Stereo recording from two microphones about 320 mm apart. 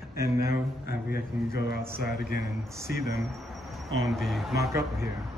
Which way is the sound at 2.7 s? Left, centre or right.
Centre.